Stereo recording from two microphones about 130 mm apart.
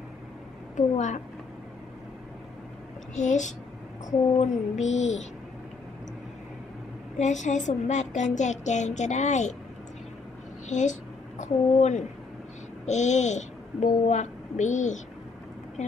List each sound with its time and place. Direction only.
0.7 s a woman's voice: 65° left (ahead or behind)
3.2 s a woman's voice: 65° left (ahead or behind)
7.2 s a woman's voice: 65° left (ahead or behind)
10.7 s a woman's voice: 70° left (ahead or behind)